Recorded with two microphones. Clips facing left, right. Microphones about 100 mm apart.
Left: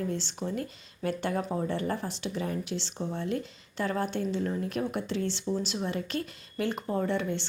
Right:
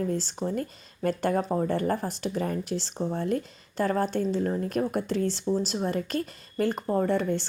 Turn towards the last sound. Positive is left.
turn(degrees=-40)  # may be behind; listen again after turning